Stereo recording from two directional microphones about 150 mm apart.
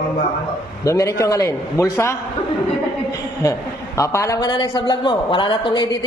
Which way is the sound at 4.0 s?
20° left (ahead or behind).